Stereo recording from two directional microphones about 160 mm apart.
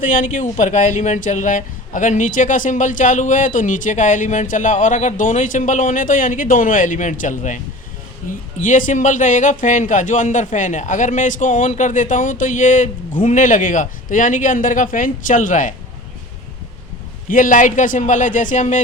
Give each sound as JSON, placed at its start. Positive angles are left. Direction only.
{"t": 0.0, "sound": "speech", "side_deg": 55}
{"t": 8.6, "sound": "speech", "side_deg": 55}
{"t": 17.2, "sound": "speech", "side_deg": 60}